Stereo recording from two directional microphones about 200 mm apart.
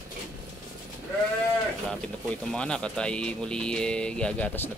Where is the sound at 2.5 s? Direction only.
5° left (ahead or behind).